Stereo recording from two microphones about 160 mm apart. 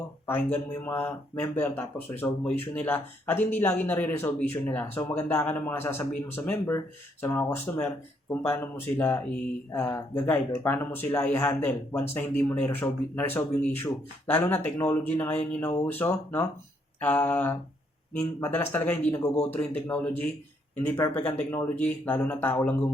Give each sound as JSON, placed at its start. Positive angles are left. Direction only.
{"t": 0.3, "sound": "speech", "side_deg": 15}